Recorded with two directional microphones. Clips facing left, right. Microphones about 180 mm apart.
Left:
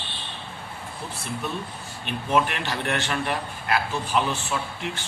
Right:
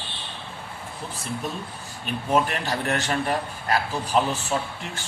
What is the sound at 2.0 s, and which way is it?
A man's voice, 40° right (ahead or behind).